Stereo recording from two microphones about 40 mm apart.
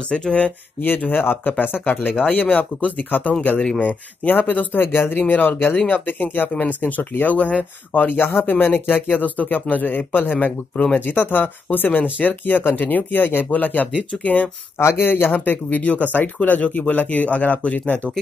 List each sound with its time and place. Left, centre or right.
0.1 s speech: left
0.7 s speech: left
1.1 s speech: left
1.6 s speech: left
2.3 s speech: left
4.3 s speech: left
4.8 s speech: left
5.1 s speech: left
7.3 s speech: left
9.2 s speech: left
14.8 s speech: left
15.8 s speech: left